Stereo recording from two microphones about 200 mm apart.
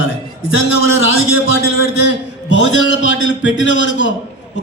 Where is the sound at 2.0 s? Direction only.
60° left (ahead or behind).